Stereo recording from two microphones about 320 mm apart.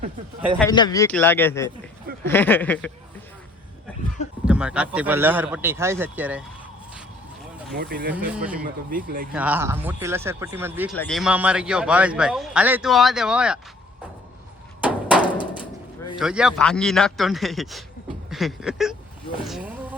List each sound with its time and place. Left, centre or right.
0.6 s speech: centre
4.4 s speech: centre
7.8 s speech: right
8.1 s speech: centre
8.6 s speech: right
9.3 s speech: centre
14.8 s a sound: centre
16.1 s speech: centre
18.3 s a sound: centre
19.4 s speech: centre